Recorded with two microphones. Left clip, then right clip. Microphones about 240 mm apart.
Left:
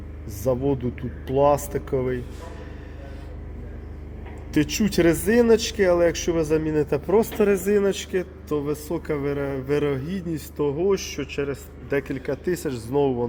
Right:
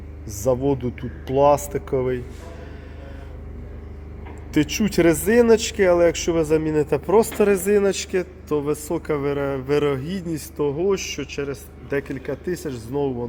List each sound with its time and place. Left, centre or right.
0.3 s a man's voice: right
4.5 s a man's voice: centre
10.6 s a man's voice: centre
12.5 s speech: centre